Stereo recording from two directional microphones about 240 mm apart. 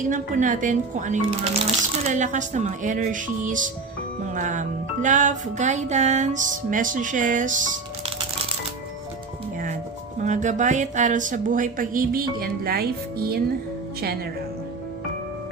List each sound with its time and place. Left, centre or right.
0.1 s speech: right
10.2 s speech: right